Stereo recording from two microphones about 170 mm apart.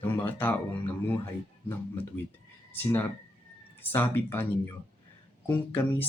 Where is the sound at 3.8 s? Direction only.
15° left (ahead or behind).